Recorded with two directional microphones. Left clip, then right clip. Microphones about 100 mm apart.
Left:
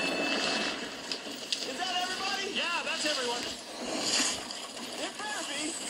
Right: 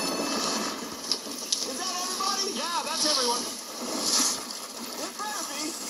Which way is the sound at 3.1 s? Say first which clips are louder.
Right 8 dB; 40° right (ahead or behind).